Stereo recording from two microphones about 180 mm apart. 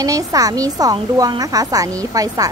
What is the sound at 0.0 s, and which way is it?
A woman's voice, 20° right (ahead or behind).